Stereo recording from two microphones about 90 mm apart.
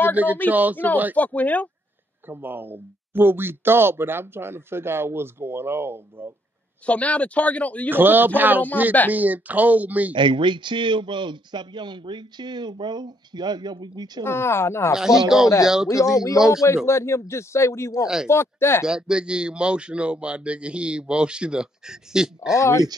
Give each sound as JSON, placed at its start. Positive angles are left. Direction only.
{"t": 0.1, "sound": "speech", "side_deg": -20}
{"t": 1.1, "sound": "speech", "side_deg": 15}
{"t": 2.2, "sound": "speech", "side_deg": -20}
{"t": 6.9, "sound": "speech", "side_deg": 15}
{"t": 7.9, "sound": "speech", "side_deg": -20}
{"t": 10.1, "sound": "a man's voice", "side_deg": -65}
{"t": 14.2, "sound": "speech", "side_deg": 25}
{"t": 15.2, "sound": "speech", "side_deg": -5}
{"t": 16.6, "sound": "a man's voice", "side_deg": 30}
{"t": 18.0, "sound": "speech", "side_deg": -5}
{"t": 18.3, "sound": "speech", "side_deg": 30}
{"t": 18.9, "sound": "speech", "side_deg": -10}
{"t": 22.6, "sound": "a man's voice", "side_deg": 35}